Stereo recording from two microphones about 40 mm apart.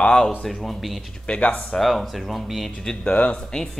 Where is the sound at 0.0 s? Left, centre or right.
Left.